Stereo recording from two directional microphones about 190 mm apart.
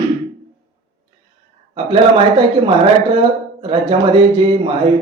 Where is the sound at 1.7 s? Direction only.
25° right (ahead or behind).